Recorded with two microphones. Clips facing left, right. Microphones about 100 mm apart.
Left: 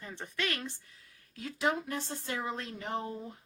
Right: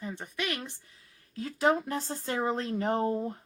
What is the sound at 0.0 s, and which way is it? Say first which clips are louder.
Speech: right 2 dB; 15° right (ahead or behind).